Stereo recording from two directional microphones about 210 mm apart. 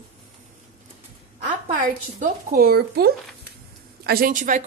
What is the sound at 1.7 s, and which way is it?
A woman's voice, 40° right (ahead or behind).